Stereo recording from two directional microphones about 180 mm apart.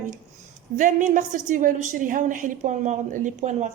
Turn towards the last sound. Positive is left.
turn(degrees=-40)  # may be behind; listen again after turning